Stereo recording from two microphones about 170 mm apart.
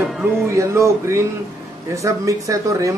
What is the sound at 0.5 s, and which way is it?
A man's voice, 15° right (ahead or behind).